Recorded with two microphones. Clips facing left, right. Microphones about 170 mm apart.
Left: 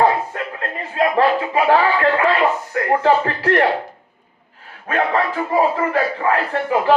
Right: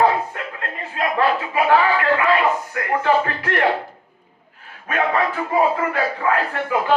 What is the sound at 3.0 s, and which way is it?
Speech, 30° left (ahead or behind).